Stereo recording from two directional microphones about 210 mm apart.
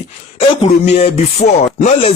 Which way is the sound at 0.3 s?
30° left (ahead or behind).